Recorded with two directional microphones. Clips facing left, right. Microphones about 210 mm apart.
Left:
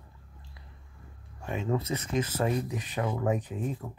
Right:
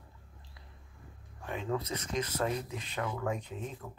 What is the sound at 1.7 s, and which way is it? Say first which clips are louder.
Speech: left 5 dB; 15° left (ahead or behind).